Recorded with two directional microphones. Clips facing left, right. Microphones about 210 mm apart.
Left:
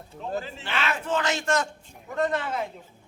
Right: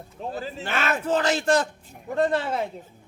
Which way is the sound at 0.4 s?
40° right (ahead or behind).